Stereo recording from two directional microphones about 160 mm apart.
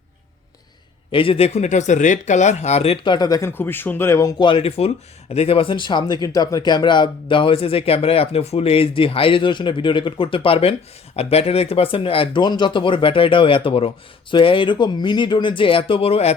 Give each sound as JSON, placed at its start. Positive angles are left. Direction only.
{"t": 1.1, "sound": "speech", "side_deg": 35}